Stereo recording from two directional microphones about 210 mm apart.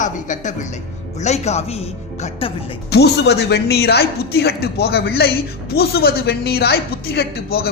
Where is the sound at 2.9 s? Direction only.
50° left (ahead or behind).